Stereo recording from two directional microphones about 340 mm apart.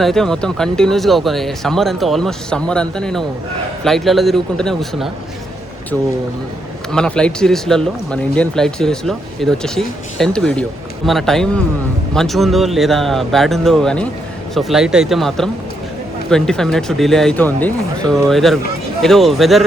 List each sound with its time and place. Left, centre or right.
0.0 s speech: centre
6.9 s speech: centre